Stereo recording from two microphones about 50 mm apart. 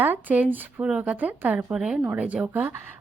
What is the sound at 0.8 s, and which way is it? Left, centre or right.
Speech, right.